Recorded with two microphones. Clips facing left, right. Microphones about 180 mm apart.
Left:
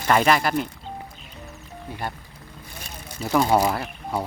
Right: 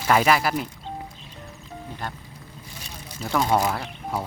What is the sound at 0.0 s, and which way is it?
Speech, 5° right (ahead or behind).